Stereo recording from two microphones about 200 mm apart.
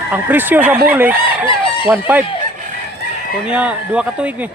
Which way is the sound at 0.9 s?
10° right (ahead or behind).